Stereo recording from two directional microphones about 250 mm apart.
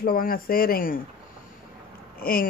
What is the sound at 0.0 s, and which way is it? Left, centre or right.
Speech, left.